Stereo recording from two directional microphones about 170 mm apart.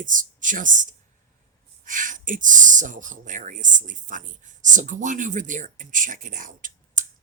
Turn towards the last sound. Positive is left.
turn(degrees=-50)  # may be behind; listen again after turning